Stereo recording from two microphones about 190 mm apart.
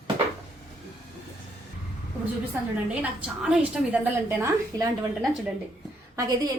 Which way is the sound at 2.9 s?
5° right (ahead or behind).